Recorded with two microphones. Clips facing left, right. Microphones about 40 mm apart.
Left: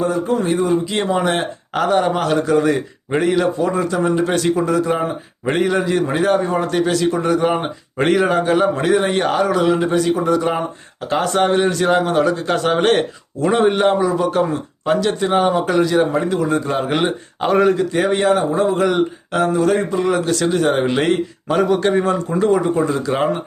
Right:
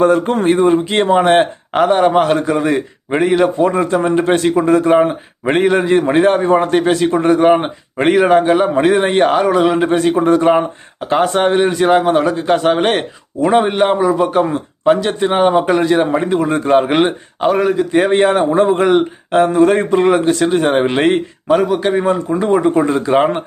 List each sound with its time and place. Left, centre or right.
0.0 s a man's voice: right
3.6 s a man's voice: right
7.9 s a man's voice: centre
8.8 s speech: right
11.0 s speech: right
17.4 s a man's voice: centre
18.1 s a man's voice: right
20.3 s speech: right
21.4 s a man's voice: centre
22.4 s speech: right